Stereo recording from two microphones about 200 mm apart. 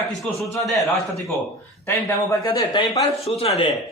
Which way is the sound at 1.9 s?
15° left (ahead or behind).